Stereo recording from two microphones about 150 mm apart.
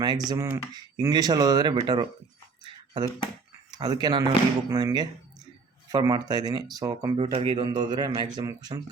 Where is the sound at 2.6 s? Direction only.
30° right (ahead or behind).